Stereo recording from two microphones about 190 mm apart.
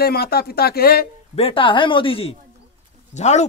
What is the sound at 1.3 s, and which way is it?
A man's voice, 30° left (ahead or behind).